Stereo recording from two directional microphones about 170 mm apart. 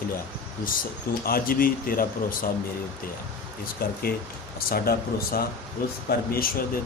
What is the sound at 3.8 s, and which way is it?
A man's voice, 60° left (ahead or behind).